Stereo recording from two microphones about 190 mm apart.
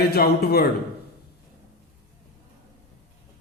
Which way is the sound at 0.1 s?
55° left (ahead or behind).